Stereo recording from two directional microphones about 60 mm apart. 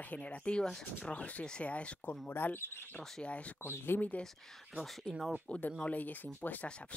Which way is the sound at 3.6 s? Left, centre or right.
Left.